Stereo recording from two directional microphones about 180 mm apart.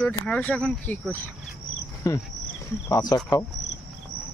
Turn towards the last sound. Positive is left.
turn(degrees=20)  # may be behind; listen again after turning